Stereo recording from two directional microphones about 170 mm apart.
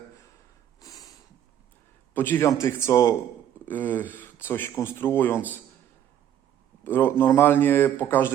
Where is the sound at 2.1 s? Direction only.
10° left (ahead or behind).